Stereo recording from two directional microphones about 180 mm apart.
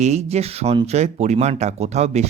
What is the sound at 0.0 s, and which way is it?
Speech, 40° right (ahead or behind).